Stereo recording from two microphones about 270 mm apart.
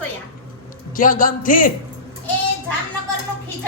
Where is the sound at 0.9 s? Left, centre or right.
Left.